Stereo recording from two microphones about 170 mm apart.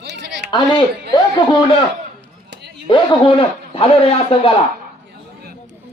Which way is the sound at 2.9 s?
30° left (ahead or behind).